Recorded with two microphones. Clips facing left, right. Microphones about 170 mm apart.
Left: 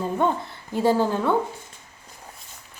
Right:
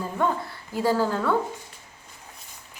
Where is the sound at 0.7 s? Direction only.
20° left (ahead or behind).